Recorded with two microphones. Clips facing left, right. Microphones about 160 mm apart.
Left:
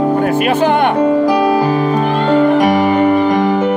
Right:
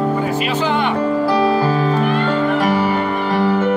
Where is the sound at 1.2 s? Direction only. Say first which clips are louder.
Left 3 dB; 15° left (ahead or behind).